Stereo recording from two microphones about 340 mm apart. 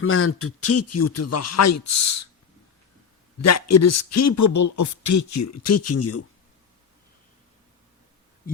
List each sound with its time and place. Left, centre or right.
0.0 s speech: left
3.4 s speech: left